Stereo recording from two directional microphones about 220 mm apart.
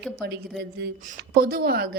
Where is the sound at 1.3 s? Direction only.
45° right (ahead or behind).